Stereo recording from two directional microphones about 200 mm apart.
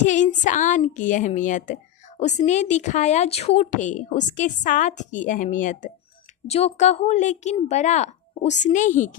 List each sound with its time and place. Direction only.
0.0 s speech: 40° left (ahead or behind)